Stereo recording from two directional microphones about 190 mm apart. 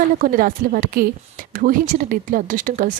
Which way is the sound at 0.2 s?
45° right (ahead or behind).